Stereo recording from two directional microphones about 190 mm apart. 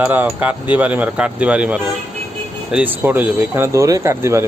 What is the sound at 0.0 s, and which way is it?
Speech, 10° right (ahead or behind).